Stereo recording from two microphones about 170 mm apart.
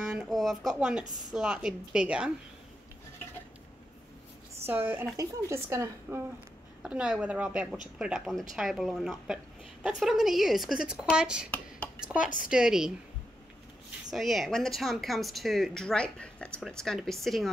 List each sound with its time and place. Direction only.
0.1 s a sound: 5° right (ahead or behind)
1.3 s speech: 5° right (ahead or behind)
4.6 s speech: 10° right (ahead or behind)
12.2 s a woman's voice: 50° left (ahead or behind)
12.4 s speech: 5° right (ahead or behind)
14.1 s speech: centre (ahead or behind)